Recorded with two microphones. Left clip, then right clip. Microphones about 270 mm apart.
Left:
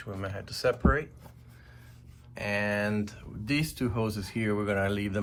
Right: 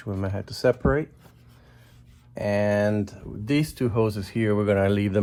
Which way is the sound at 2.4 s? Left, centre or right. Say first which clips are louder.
Right 7 dB; right.